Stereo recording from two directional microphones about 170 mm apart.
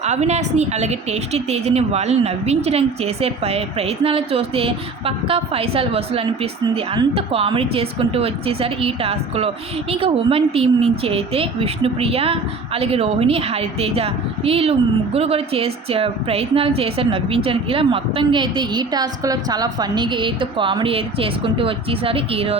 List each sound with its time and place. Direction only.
0.0 s speech: 40° right (ahead or behind)